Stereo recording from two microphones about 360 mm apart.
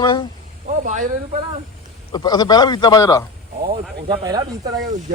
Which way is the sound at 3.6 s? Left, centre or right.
Centre.